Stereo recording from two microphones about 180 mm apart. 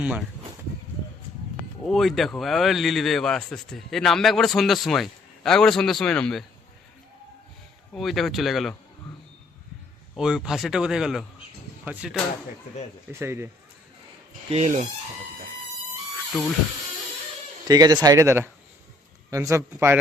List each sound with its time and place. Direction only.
0.0 s speech: 5° right (ahead or behind)
1.9 s speech: centre (ahead or behind)
7.9 s speech: centre (ahead or behind)
10.2 s speech: 5° right (ahead or behind)
13.1 s speech: 15° right (ahead or behind)
14.5 s speech: 40° right (ahead or behind)
17.7 s speech: 20° right (ahead or behind)